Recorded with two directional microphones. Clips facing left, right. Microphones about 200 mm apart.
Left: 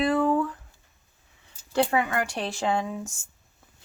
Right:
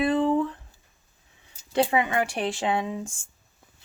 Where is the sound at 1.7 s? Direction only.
20° right (ahead or behind).